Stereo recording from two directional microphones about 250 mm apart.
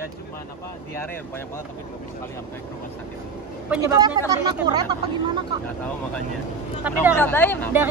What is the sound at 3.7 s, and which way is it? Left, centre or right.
Speech, centre.